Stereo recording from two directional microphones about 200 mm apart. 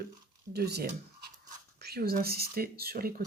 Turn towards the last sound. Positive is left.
turn(degrees=-50)  # may be behind; listen again after turning